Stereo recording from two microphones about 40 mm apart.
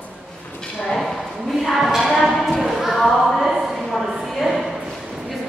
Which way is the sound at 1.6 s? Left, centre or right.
Centre.